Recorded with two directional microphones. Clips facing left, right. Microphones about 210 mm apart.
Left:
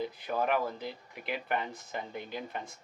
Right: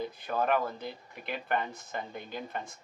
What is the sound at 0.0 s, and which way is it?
Speech, 5° left (ahead or behind).